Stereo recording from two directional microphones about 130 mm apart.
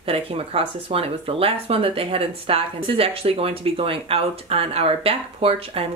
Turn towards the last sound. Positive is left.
turn(degrees=-50)  # may be behind; listen again after turning